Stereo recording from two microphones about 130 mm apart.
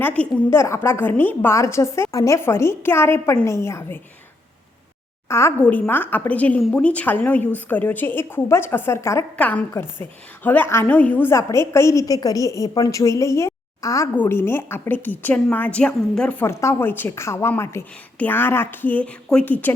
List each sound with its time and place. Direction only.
0.0 s a woman's voice: 10° left (ahead or behind)
5.3 s a woman's voice: 20° left (ahead or behind)
9.3 s a woman's voice: 10° left (ahead or behind)
16.4 s a woman's voice: 20° left (ahead or behind)